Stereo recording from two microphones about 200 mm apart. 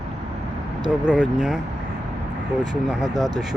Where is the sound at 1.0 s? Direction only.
5° right (ahead or behind).